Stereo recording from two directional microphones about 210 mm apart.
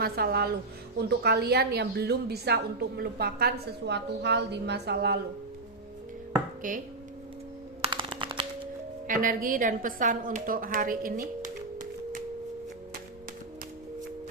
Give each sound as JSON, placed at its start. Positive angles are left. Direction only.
{"t": 0.0, "sound": "a woman's voice", "side_deg": -45}
{"t": 6.6, "sound": "chopping", "side_deg": -40}
{"t": 7.8, "sound": "a sound", "side_deg": -25}
{"t": 9.0, "sound": "a woman's voice", "side_deg": -40}